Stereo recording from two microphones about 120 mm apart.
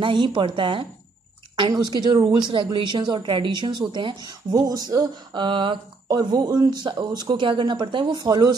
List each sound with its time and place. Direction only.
0.0 s speech: 40° right (ahead or behind)
1.6 s speech: 35° right (ahead or behind)